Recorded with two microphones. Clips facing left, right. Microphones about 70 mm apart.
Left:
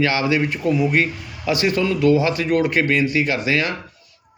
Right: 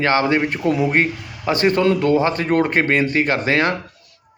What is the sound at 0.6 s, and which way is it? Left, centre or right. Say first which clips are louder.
Speech: right 1 dB; right.